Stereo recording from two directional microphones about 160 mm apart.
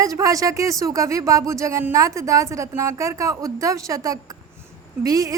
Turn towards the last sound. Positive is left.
turn(degrees=-20)  # may be behind; listen again after turning